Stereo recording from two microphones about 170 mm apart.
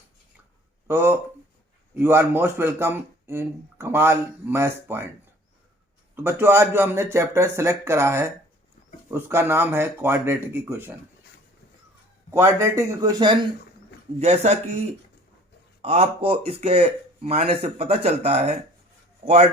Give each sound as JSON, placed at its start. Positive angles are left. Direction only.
{"t": 0.9, "sound": "speech", "side_deg": -15}
{"t": 6.2, "sound": "speech", "side_deg": -15}
{"t": 12.3, "sound": "speech", "side_deg": -15}
{"t": 14.2, "sound": "speech", "side_deg": -40}